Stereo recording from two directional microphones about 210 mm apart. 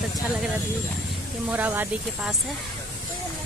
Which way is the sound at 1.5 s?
10° right (ahead or behind).